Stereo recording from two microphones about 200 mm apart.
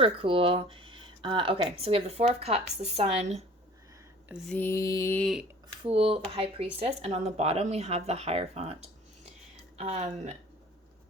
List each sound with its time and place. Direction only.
0.0 s speech: 25° right (ahead or behind)
4.5 s a sound: 15° left (ahead or behind)
5.8 s speech: 30° right (ahead or behind)